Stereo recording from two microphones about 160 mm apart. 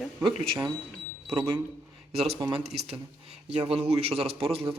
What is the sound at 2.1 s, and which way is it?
A man's voice, 40° right (ahead or behind).